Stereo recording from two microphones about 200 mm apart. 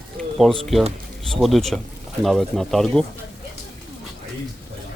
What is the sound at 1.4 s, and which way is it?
Speech, centre (ahead or behind).